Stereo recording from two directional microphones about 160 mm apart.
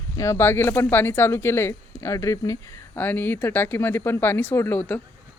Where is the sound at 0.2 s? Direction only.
15° left (ahead or behind).